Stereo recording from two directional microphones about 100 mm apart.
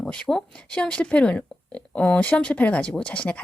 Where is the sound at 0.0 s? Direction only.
10° left (ahead or behind).